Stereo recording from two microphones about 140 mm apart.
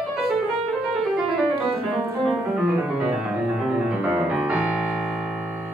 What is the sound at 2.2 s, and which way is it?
Music, 5° right (ahead or behind).